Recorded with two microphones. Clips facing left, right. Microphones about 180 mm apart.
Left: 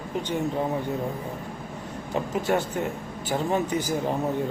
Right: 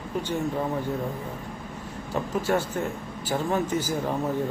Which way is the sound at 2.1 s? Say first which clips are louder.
Even; 20° left (ahead or behind).